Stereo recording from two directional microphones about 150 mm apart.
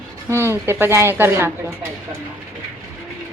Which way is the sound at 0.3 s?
15° right (ahead or behind).